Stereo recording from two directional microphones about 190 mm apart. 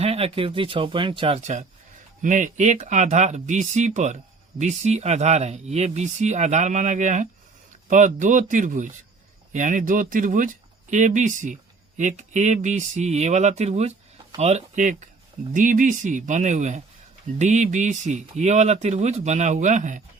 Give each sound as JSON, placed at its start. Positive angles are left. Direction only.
{"t": 0.0, "sound": "speech", "side_deg": -30}